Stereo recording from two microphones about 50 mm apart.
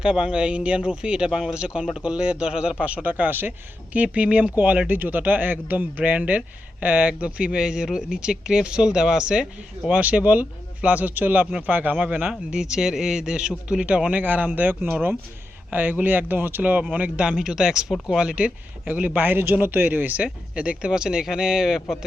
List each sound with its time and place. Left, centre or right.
0.0 s speech: centre
2.8 s speech: right
3.9 s speech: right
9.9 s speech: right
12.3 s speech: centre; by 16.8 s right
16.9 s speech: right